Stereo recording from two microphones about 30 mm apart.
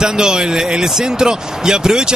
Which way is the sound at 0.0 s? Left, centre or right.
Right.